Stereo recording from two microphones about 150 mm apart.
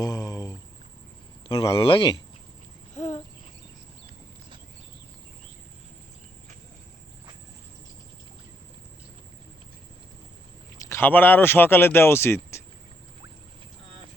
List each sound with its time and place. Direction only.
0.0 s a sound: 25° left (ahead or behind)
1.5 s speech: 35° left (ahead or behind)
2.9 s cricket: 50° left (ahead or behind)
10.8 s speech: 15° left (ahead or behind)